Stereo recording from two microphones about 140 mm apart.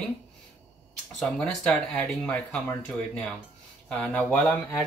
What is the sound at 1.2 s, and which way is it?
Speech, 5° left (ahead or behind).